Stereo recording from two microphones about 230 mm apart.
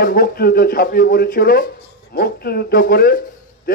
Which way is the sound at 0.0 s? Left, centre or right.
Left.